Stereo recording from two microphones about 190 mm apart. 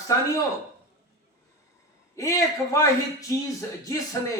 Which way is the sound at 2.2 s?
15° left (ahead or behind).